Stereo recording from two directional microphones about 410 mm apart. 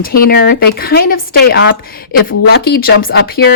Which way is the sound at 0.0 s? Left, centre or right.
Left.